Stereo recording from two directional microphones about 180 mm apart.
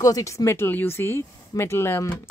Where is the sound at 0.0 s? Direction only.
20° left (ahead or behind).